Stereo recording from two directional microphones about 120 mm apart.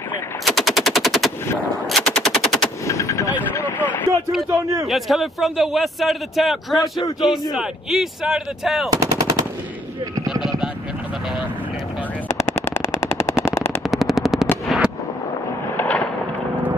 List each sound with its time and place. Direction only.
0.5 s machine gun: centre (ahead or behind)
2.8 s artillery fire: 25° left (ahead or behind)
3.5 s vehicle: 15° left (ahead or behind)
4.5 s speech: 25° right (ahead or behind)
4.8 s a man's voice: centre (ahead or behind)
8.9 s machine gun: 30° right (ahead or behind)
10.2 s a sound: 5° right (ahead or behind)
12.3 s machine gun: 20° left (ahead or behind)
13.8 s machine gun: centre (ahead or behind)
14.7 s fireworks: centre (ahead or behind)
15.7 s fireworks: 15° left (ahead or behind)